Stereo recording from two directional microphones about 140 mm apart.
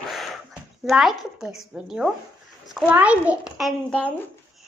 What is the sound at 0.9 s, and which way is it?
A child's voice, 5° right (ahead or behind).